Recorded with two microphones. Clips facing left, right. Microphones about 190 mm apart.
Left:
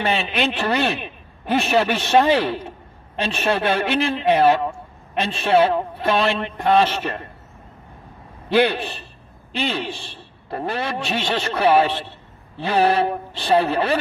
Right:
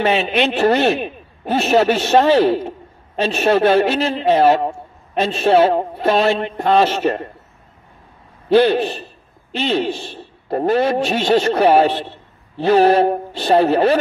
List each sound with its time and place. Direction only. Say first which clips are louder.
0.0 s a man's voice: right 5 dB; 45° right (ahead or behind)
8.5 s a man's voice: right 5 dB; 45° right (ahead or behind)